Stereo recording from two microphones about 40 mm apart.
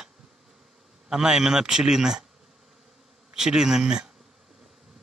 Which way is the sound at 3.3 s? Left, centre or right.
Centre.